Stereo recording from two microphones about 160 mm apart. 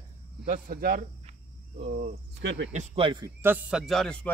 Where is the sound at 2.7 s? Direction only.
45° right (ahead or behind).